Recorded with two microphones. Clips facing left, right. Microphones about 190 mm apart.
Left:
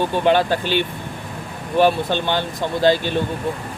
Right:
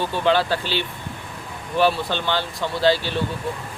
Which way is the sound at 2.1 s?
15° left (ahead or behind).